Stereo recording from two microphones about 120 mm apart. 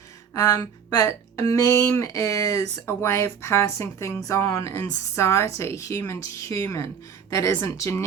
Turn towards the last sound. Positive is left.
turn(degrees=25)  # may be behind; listen again after turning